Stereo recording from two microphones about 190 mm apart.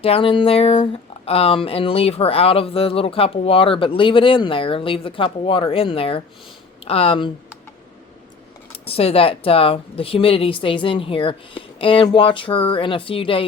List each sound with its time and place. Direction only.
0.0 s speech: 30° left (ahead or behind)
8.8 s speech: 30° left (ahead or behind)